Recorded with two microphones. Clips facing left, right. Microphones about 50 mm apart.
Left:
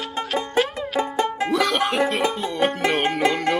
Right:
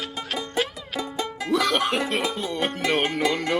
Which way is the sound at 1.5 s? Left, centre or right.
Centre.